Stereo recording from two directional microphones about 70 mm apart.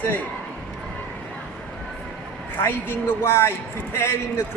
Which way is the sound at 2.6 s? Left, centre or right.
Left.